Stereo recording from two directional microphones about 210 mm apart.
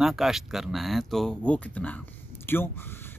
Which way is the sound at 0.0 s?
Centre (ahead or behind).